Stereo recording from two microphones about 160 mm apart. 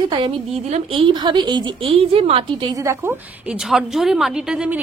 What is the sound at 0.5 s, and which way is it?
Speech, 45° right (ahead or behind).